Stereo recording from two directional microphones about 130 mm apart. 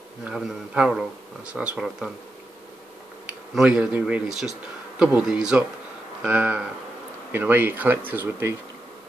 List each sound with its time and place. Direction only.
0.2 s speech: 5° right (ahead or behind)
3.5 s speech: 5° right (ahead or behind)